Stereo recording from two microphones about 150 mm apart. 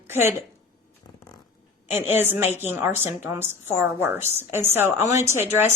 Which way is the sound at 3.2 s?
15° right (ahead or behind).